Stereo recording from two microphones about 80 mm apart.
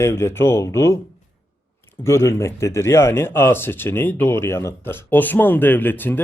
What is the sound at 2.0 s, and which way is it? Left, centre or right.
Speech, left.